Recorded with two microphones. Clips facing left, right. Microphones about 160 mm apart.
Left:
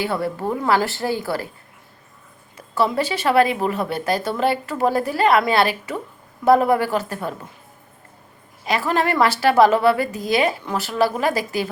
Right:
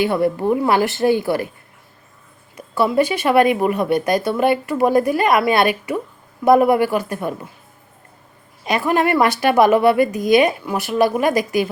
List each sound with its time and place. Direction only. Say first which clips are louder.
0.0 s speech: right 6 dB; 15° right (ahead or behind)
2.6 s speech: right 4 dB; 10° right (ahead or behind)
8.6 s speech: right 3 dB; 20° right (ahead or behind)